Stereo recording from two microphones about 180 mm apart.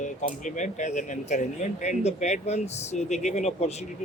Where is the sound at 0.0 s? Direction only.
45° left (ahead or behind).